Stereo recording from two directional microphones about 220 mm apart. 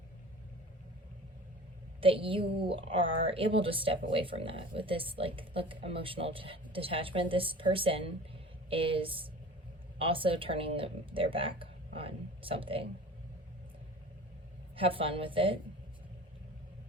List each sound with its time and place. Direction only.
2.0 s a woman's voice: 25° right (ahead or behind)
2.4 s speech: 45° right (ahead or behind)
2.7 s speech: 25° right (ahead or behind)
14.8 s speech: 25° right (ahead or behind)